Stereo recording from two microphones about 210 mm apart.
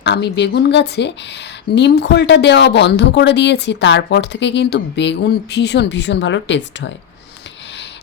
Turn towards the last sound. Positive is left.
turn(degrees=60)  # may be behind; listen again after turning